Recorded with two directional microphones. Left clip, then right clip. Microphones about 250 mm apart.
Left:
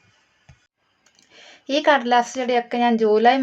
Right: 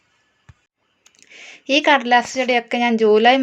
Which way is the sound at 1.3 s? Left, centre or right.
Right.